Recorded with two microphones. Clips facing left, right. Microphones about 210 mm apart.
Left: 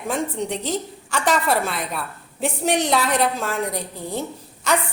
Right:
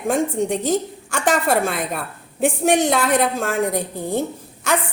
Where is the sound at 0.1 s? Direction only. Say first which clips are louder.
Right 5 dB; 45° right (ahead or behind).